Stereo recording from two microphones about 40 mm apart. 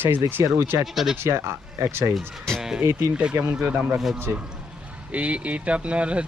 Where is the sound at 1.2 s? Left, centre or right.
Right.